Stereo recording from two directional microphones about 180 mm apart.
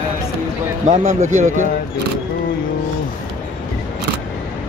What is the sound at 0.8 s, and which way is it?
Speech, 40° right (ahead or behind).